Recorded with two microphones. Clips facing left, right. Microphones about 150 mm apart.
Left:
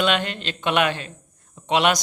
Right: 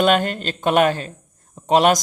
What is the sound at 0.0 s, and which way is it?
Speech, 45° right (ahead or behind).